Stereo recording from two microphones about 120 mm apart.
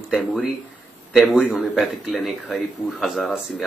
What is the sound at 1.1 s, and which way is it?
Speech, 5° right (ahead or behind).